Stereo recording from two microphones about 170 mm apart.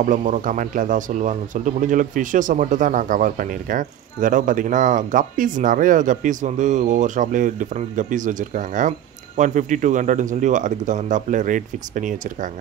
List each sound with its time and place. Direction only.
0.0 s speech: 50° right (ahead or behind)